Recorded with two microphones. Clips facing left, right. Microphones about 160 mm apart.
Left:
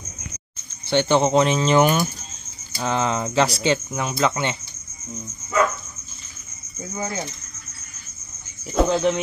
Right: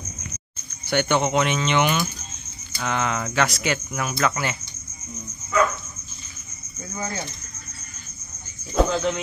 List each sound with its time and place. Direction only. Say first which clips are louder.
0.8 s speech: left 3 dB; 30° left (ahead or behind)
6.8 s speech: left 2 dB; 20° left (ahead or behind)
8.8 s speech: left 8 dB; 20° left (ahead or behind)